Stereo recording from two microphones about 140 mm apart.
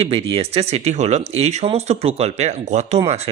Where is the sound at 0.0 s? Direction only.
45° right (ahead or behind).